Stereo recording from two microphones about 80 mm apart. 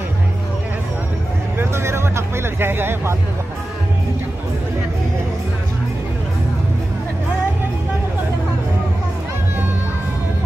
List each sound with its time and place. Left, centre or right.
1.6 s vehicle: right